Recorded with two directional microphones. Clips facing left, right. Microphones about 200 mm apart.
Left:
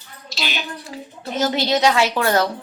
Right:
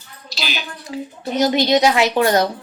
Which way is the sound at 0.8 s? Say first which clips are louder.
Right 5 dB; 20° right (ahead or behind).